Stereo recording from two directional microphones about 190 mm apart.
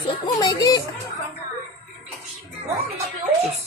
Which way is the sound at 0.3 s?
20° left (ahead or behind).